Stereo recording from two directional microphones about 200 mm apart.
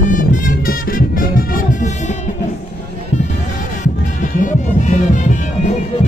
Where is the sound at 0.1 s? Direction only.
40° left (ahead or behind).